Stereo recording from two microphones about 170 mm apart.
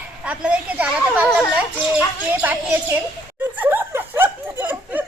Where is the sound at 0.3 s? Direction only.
5° right (ahead or behind).